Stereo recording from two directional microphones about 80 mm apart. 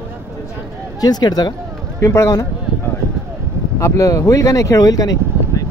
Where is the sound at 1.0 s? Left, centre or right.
Left.